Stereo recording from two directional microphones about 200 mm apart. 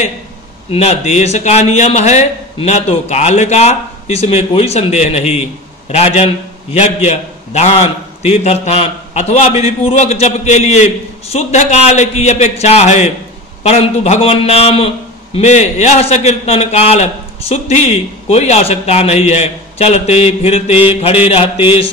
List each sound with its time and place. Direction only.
0.7 s a man's voice: 30° left (ahead or behind)